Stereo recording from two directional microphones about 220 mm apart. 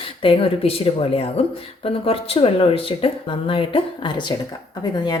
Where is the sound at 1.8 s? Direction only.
25° left (ahead or behind).